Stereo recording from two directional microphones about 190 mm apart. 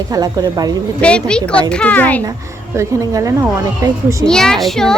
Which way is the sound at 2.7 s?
15° right (ahead or behind).